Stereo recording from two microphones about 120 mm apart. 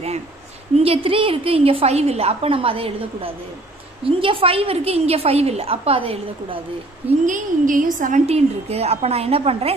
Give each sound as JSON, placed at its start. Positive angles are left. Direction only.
{"t": 0.7, "sound": "a woman's voice", "side_deg": -50}
{"t": 7.2, "sound": "a woman's voice", "side_deg": -90}